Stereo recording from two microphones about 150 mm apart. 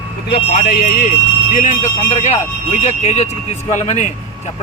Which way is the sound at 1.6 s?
55° left (ahead or behind).